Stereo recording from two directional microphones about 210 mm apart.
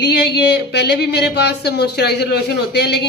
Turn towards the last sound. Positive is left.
turn(degrees=55)  # may be behind; listen again after turning